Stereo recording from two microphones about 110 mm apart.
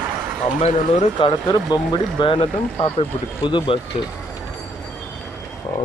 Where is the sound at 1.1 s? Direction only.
45° left (ahead or behind).